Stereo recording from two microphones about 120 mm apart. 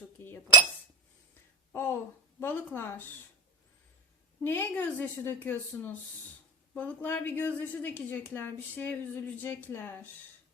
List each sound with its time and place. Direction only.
1.7 s a woman's voice: 20° left (ahead or behind)
4.4 s a woman's voice: 20° left (ahead or behind)